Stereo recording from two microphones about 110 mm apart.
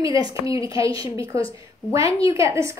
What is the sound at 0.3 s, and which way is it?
Speech, 30° right (ahead or behind).